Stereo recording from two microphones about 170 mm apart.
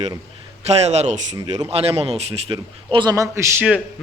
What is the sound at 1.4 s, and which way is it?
Speech, 25° right (ahead or behind).